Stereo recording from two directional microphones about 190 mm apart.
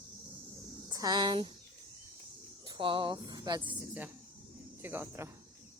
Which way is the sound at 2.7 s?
25° right (ahead or behind).